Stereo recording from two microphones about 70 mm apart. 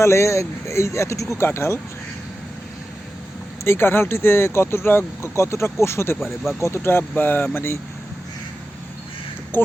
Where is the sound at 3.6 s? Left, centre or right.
Left.